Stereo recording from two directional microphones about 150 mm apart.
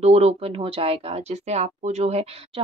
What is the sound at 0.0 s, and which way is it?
Speech, 45° right (ahead or behind).